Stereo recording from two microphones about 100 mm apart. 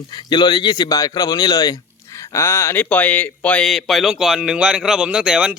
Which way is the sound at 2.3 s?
25° left (ahead or behind).